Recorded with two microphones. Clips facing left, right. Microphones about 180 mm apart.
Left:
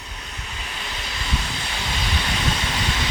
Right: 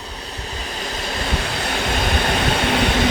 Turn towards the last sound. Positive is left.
turn(degrees=-60)  # may be behind; listen again after turning